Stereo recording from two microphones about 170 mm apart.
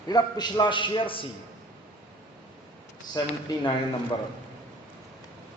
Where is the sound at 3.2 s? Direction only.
20° left (ahead or behind).